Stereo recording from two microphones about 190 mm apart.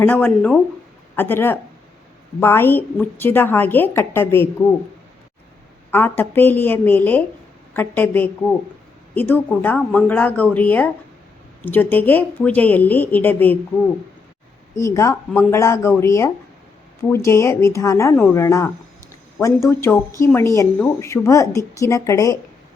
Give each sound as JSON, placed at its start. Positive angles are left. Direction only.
{"t": 0.0, "sound": "a woman's voice", "side_deg": 10}
{"t": 5.9, "sound": "a woman's voice", "side_deg": 10}
{"t": 14.8, "sound": "a woman's voice", "side_deg": 15}